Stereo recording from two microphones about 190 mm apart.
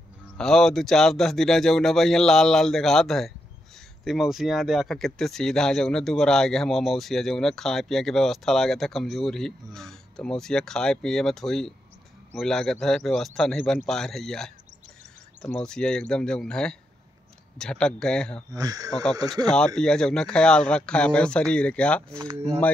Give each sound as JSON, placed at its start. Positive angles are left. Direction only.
{"t": 0.4, "sound": "speech", "side_deg": 0}
{"t": 18.5, "sound": "speech", "side_deg": -20}
{"t": 19.4, "sound": "speech", "side_deg": 5}